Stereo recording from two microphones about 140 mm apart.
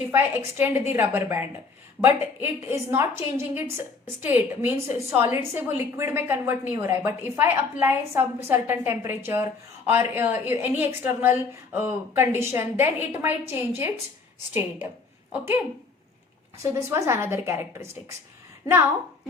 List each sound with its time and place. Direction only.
0.1 s a woman's voice: 15° right (ahead or behind)
15.3 s a woman's voice: 15° right (ahead or behind)
16.6 s a woman's voice: 20° right (ahead or behind)